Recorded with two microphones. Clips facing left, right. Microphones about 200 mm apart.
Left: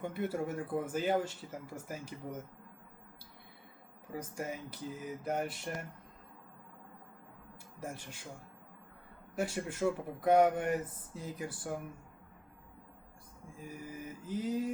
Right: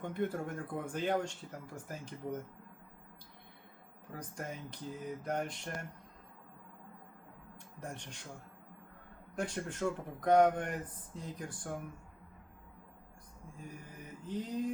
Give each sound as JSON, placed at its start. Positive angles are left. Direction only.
{"t": 0.0, "sound": "speech", "side_deg": 5}
{"t": 4.1, "sound": "speech", "side_deg": 5}
{"t": 7.8, "sound": "speech", "side_deg": 5}
{"t": 9.3, "sound": "speech", "side_deg": 5}
{"t": 13.7, "sound": "mantra", "side_deg": 5}